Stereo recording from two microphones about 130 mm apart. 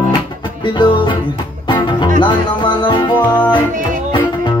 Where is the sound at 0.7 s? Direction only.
35° left (ahead or behind).